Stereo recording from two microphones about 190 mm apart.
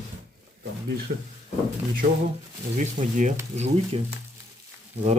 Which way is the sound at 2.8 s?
40° right (ahead or behind).